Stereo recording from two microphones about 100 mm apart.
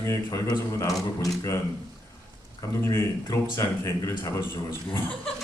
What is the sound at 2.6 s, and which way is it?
Speech, 30° left (ahead or behind).